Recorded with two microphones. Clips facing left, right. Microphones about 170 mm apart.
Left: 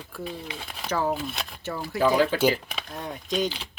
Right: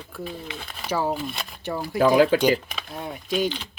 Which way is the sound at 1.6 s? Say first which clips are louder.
Right 3 dB; 15° right (ahead or behind).